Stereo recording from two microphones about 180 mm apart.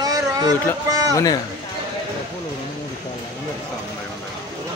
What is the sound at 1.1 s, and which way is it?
Speech, 20° left (ahead or behind).